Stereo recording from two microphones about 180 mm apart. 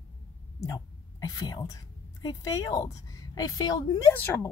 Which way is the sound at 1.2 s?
20° left (ahead or behind).